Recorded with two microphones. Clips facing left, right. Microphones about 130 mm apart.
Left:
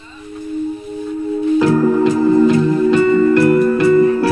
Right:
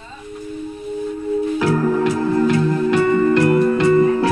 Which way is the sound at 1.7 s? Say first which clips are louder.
Left 4 dB; 10° left (ahead or behind).